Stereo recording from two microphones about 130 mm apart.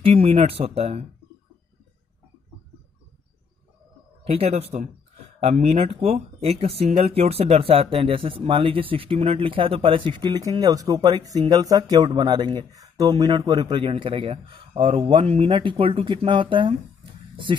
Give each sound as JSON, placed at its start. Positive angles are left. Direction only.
{"t": 0.0, "sound": "speech", "side_deg": -45}
{"t": 4.2, "sound": "speech", "side_deg": -50}